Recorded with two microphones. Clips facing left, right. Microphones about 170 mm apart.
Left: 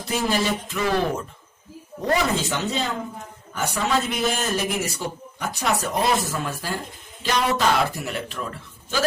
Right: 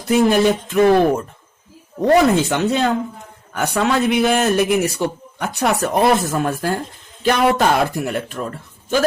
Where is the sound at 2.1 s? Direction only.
60° right (ahead or behind).